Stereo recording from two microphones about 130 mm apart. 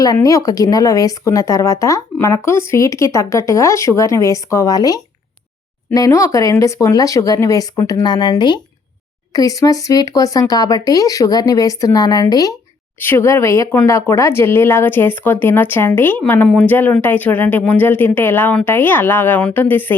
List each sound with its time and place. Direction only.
0.0 s speech: 25° left (ahead or behind)
13.0 s speech: 20° left (ahead or behind)